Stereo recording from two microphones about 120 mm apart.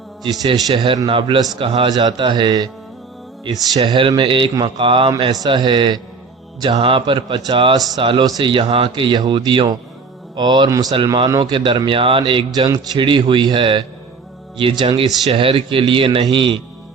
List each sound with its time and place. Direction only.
0.2 s a man's voice: 35° right (ahead or behind)
0.7 s speech: 45° right (ahead or behind)
3.8 s speech: 45° right (ahead or behind)
10.9 s speech: 45° right (ahead or behind)